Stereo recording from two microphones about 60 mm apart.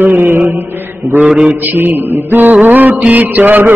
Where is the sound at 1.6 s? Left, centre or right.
Right.